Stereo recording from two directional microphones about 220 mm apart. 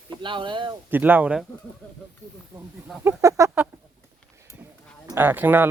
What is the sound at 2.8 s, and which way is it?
Speech, 10° right (ahead or behind).